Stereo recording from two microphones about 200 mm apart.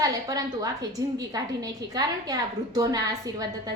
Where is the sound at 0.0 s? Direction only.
20° right (ahead or behind).